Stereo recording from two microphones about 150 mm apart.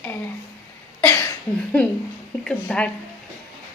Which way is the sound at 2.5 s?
10° left (ahead or behind).